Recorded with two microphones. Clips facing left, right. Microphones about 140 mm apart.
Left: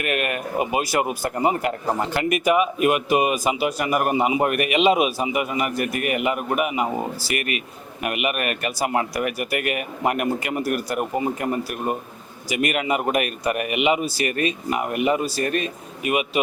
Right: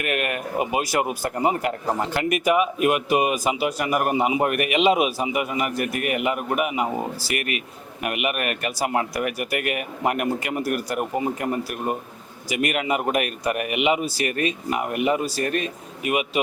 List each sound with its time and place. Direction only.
0.0 s speech: 15° left (ahead or behind)
6.8 s speech: 30° left (ahead or behind)
7.3 s speech: 10° left (ahead or behind)